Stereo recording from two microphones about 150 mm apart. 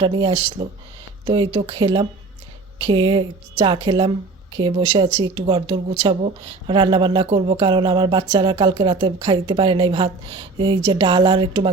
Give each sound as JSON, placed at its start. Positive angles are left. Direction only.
{"t": 0.0, "sound": "speech", "side_deg": -30}